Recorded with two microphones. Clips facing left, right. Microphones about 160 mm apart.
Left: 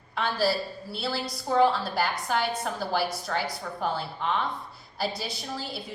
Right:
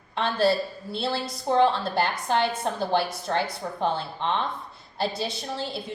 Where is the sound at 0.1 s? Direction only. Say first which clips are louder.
Right 3 dB; 25° right (ahead or behind).